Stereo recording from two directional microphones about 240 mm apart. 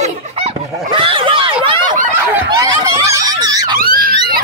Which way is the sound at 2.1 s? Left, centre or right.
Centre.